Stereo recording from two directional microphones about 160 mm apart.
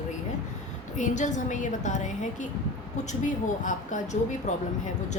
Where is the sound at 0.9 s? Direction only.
50° left (ahead or behind).